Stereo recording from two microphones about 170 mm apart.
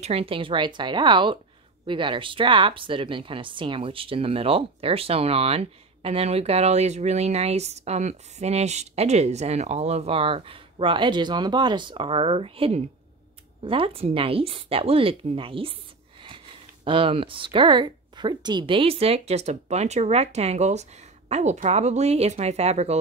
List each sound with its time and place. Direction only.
0.0 s speech: 35° right (ahead or behind)